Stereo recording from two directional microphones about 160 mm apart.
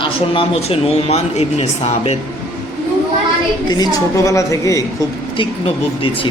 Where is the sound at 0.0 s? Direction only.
35° left (ahead or behind).